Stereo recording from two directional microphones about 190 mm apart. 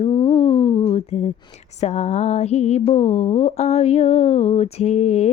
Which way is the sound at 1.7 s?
35° left (ahead or behind).